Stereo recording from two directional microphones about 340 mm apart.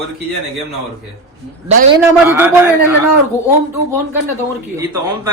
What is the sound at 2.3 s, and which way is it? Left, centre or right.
Speech, centre.